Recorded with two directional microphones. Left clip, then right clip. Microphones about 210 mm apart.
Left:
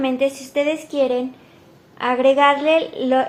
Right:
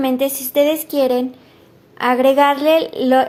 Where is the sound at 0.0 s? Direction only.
45° right (ahead or behind).